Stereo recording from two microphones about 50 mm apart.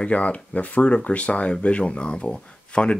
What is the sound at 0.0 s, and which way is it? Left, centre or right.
Speech, left.